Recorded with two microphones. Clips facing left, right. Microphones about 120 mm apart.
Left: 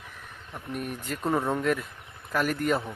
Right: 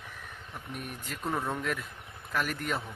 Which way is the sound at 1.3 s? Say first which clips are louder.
Left 6 dB; 30° left (ahead or behind).